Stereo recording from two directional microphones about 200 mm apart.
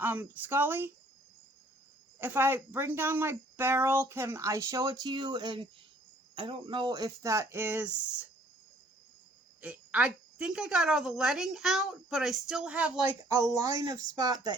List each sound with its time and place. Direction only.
0.0 s speech: 10° right (ahead or behind)
2.1 s speech: 10° right (ahead or behind)
9.6 s a woman's voice: 5° right (ahead or behind)
13.2 s speech: 15° right (ahead or behind)